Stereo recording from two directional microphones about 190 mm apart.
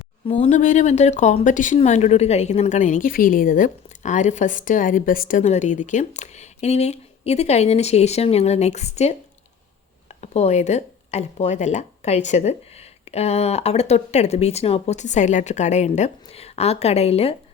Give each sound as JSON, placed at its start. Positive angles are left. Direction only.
{"t": 0.3, "sound": "speech", "side_deg": 35}
{"t": 10.2, "sound": "speech", "side_deg": 35}